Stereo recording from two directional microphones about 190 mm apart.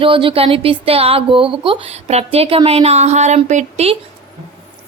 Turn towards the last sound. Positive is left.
turn(degrees=-35)  # may be behind; listen again after turning